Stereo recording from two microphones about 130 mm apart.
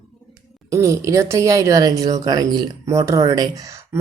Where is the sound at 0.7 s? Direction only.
25° right (ahead or behind).